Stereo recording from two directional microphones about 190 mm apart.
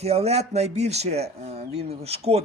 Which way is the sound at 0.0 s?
35° right (ahead or behind).